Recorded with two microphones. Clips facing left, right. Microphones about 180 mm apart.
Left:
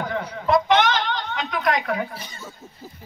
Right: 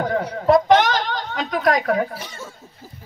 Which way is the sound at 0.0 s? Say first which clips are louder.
Right 6 dB; 40° right (ahead or behind).